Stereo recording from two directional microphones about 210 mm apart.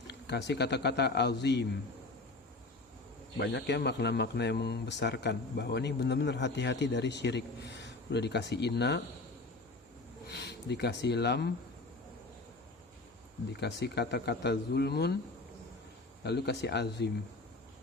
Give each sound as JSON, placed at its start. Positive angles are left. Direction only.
{"t": 0.1, "sound": "speech", "side_deg": 55}
{"t": 3.3, "sound": "speech", "side_deg": 55}
{"t": 10.2, "sound": "speech", "side_deg": 55}
{"t": 13.5, "sound": "speech", "side_deg": 55}
{"t": 16.2, "sound": "speech", "side_deg": 55}